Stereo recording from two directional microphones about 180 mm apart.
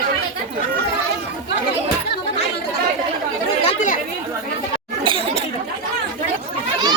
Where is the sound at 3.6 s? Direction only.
40° left (ahead or behind).